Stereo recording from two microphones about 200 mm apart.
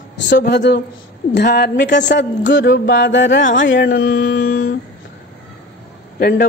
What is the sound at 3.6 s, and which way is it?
Speech, 60° left (ahead or behind).